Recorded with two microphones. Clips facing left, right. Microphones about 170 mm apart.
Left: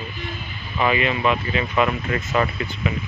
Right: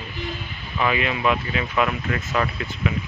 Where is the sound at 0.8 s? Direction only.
Centre (ahead or behind).